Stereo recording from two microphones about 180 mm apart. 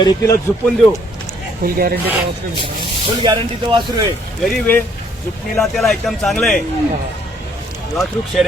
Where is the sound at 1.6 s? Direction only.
55° right (ahead or behind).